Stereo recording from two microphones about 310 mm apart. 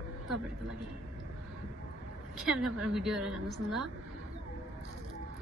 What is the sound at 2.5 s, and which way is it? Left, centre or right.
A woman's voice, centre.